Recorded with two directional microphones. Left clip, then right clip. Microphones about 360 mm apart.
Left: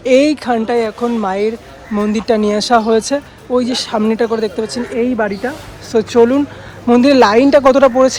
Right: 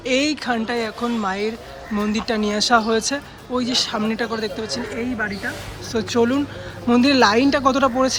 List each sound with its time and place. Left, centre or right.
0.0 s speech: centre
4.6 s speech: centre
5.4 s speech: centre